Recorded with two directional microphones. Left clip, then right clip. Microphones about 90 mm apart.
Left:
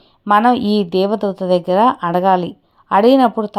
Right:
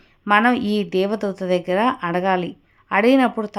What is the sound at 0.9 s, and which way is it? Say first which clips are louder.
Speech: left 4 dB; 25° right (ahead or behind).